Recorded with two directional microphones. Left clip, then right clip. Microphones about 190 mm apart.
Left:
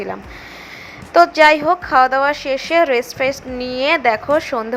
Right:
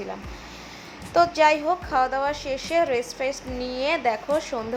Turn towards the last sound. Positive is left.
turn(degrees=30)  # may be behind; listen again after turning